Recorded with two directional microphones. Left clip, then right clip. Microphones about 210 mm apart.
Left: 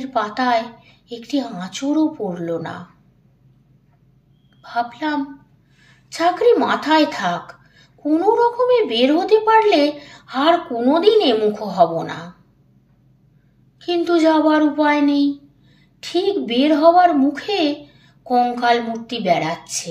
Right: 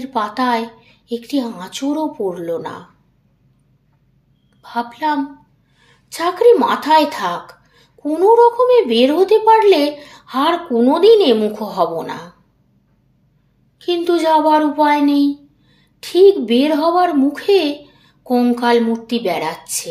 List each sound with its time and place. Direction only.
0.0 s speech: 45° right (ahead or behind)
4.6 s a woman's voice: 45° right (ahead or behind)
13.7 s speech: 45° right (ahead or behind)